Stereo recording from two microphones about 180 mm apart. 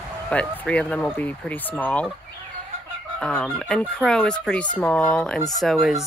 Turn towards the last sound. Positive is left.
turn(degrees=0)  # may be behind; listen again after turning